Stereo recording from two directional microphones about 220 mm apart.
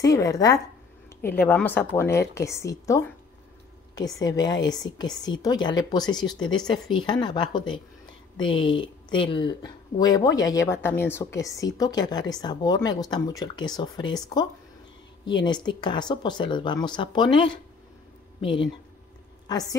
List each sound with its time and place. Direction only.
0.0 s speech: 15° left (ahead or behind)